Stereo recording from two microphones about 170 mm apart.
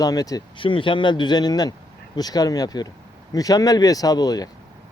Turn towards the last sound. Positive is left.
turn(degrees=20)  # may be behind; listen again after turning